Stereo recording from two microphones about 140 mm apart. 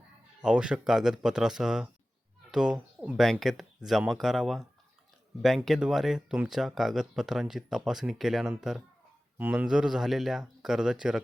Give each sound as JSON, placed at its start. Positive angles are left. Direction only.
{"t": 0.4, "sound": "speech", "side_deg": -5}